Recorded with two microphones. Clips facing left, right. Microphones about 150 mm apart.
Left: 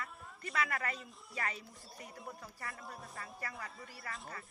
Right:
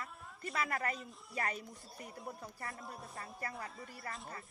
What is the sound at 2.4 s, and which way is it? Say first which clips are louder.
Speech: right 1 dB; 30° right (ahead or behind).